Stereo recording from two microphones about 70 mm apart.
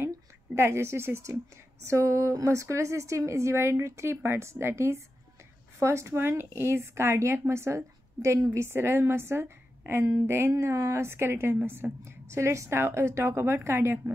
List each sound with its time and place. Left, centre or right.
0.6 s a woman's voice: right